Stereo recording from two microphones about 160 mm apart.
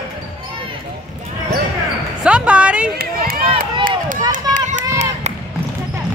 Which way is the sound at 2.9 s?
75° right (ahead or behind).